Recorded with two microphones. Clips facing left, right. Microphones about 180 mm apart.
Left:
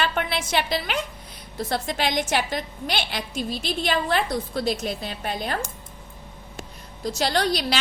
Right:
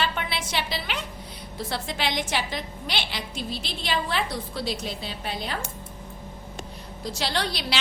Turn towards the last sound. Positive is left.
turn(degrees=45)  # may be behind; listen again after turning